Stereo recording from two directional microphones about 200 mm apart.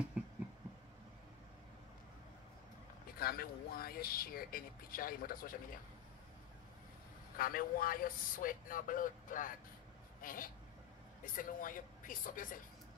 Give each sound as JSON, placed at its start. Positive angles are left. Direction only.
{"t": 0.2, "sound": "a sound", "side_deg": -5}
{"t": 3.2, "sound": "speech", "side_deg": 50}
{"t": 7.3, "sound": "speech", "side_deg": 45}